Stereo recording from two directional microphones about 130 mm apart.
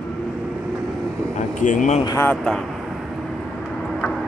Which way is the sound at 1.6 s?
75° left (ahead or behind).